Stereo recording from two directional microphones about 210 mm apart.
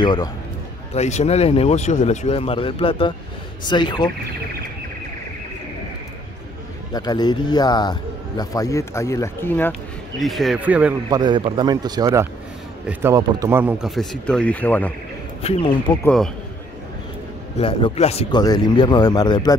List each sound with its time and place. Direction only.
0.0 s a man's voice: 20° left (ahead or behind)
0.9 s a man's voice: 30° left (ahead or behind)
6.9 s a man's voice: 20° left (ahead or behind); by 11.0 s 5° right (ahead or behind)
11.1 s a man's voice: 20° right (ahead or behind); by 16.3 s 10° left (ahead or behind)
17.6 s a man's voice: 25° left (ahead or behind)